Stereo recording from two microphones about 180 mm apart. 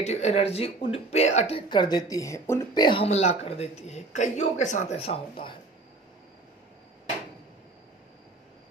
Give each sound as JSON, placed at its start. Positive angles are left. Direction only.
{"t": 0.0, "sound": "speech", "side_deg": 35}
{"t": 1.7, "sound": "speech", "side_deg": 25}